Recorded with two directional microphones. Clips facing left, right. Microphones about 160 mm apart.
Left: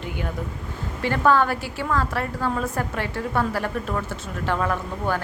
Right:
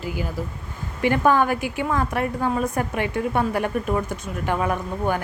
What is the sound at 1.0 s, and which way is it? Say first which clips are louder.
A woman's voice: right 1 dB; 15° right (ahead or behind).